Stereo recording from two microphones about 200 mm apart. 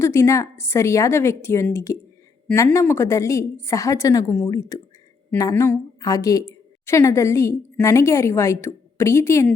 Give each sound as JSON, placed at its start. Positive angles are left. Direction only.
{"t": 0.0, "sound": "a woman's voice", "side_deg": 15}